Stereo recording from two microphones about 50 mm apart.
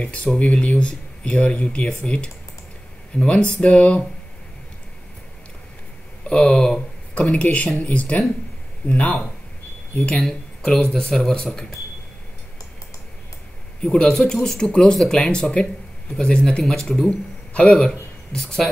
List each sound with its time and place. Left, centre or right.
0.0 s speech: left
6.2 s speech: centre
10.2 s speech: centre
13.8 s speech: left
16.8 s speech: centre
17.6 s speech: centre